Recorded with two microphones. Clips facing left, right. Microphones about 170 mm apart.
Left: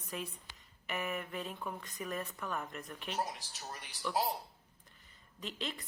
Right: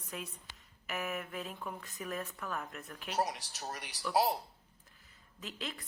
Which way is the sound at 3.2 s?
70° right (ahead or behind).